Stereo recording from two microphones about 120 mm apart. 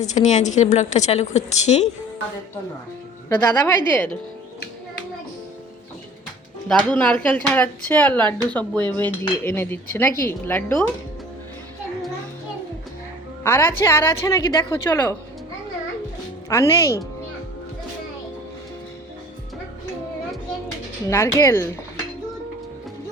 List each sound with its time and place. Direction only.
0.0 s a woman's voice: 80° left
3.2 s speech: 15° left (ahead or behind)
6.7 s a woman's voice: 10° left (ahead or behind)
13.4 s a woman's voice: 20° left (ahead or behind)
16.5 s a woman's voice: 25° left (ahead or behind)
21.1 s a woman's voice: 25° left (ahead or behind)